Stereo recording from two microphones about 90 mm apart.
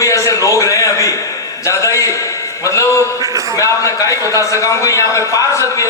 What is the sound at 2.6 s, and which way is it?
A man's voice, 35° left (ahead or behind).